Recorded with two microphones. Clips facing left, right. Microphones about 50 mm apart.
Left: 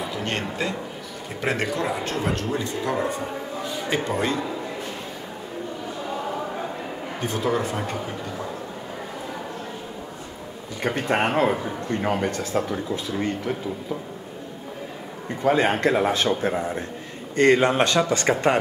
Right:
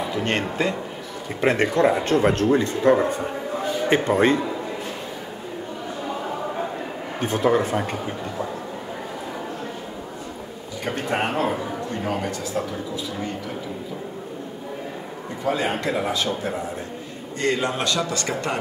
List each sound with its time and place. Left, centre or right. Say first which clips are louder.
0.4 s a man's voice: right 3 dB; right
7.2 s speech: right 5 dB; right
11.1 s speech: left 2 dB; left
15.4 s speech: left 4 dB; left
17.4 s speech: left 6 dB; left